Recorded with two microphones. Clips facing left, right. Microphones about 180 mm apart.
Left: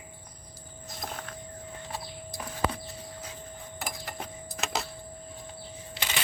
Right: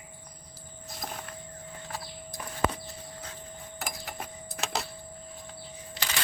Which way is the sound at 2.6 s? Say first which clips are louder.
Right 1 dB; 50° right (ahead or behind).